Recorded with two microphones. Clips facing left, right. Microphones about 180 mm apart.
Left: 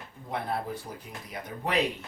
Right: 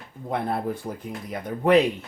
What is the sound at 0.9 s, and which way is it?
Speech, 55° right (ahead or behind).